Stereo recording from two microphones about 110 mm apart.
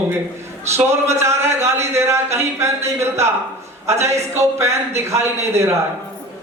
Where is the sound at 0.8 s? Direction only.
25° right (ahead or behind).